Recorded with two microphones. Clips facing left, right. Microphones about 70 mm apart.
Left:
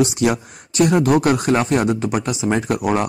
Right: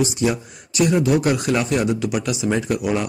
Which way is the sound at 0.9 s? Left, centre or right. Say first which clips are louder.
Left 3 dB; left.